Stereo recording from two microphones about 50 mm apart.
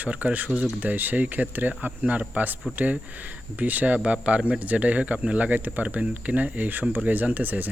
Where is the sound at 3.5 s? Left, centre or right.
Right.